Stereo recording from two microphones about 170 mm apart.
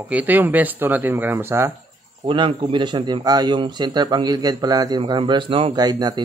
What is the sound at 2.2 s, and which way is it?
A man's voice, 30° right (ahead or behind).